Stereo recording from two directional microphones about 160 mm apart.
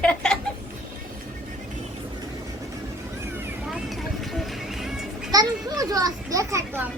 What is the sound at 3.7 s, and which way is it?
Music, centre (ahead or behind).